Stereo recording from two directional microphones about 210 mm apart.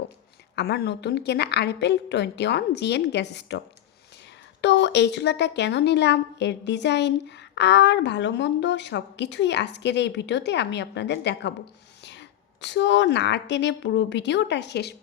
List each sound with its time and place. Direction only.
0.5 s a woman's voice: 50° left (ahead or behind)
4.6 s a woman's voice: 55° left (ahead or behind)
12.6 s a woman's voice: 60° left (ahead or behind)